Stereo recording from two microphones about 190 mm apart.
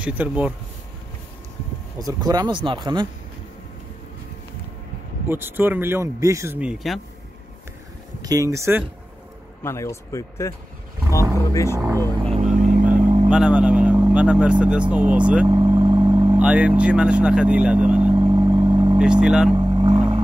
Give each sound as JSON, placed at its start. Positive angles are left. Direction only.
{"t": 0.0, "sound": "speech", "side_deg": -5}
{"t": 2.0, "sound": "speech", "side_deg": -20}
{"t": 5.3, "sound": "speech", "side_deg": -10}
{"t": 8.2, "sound": "speech", "side_deg": -20}
{"t": 9.6, "sound": "speech", "side_deg": 15}
{"t": 12.4, "sound": "vehicle", "side_deg": -40}
{"t": 13.3, "sound": "speech", "side_deg": -5}
{"t": 15.4, "sound": "vehicle", "side_deg": -25}
{"t": 16.3, "sound": "speech", "side_deg": -5}
{"t": 18.1, "sound": "vehicle", "side_deg": -25}
{"t": 18.9, "sound": "speech", "side_deg": -5}
{"t": 19.5, "sound": "vehicle", "side_deg": -25}